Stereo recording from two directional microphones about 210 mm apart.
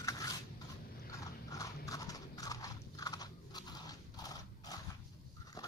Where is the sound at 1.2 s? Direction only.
15° left (ahead or behind).